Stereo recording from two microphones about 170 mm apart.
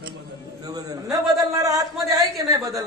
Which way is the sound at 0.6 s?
20° right (ahead or behind).